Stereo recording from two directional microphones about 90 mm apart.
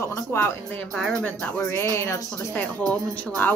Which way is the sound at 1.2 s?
15° left (ahead or behind).